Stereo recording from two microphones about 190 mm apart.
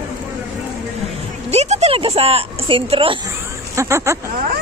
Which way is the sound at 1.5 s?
35° right (ahead or behind).